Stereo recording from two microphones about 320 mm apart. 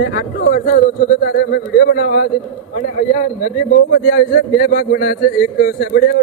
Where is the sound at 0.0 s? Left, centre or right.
Left.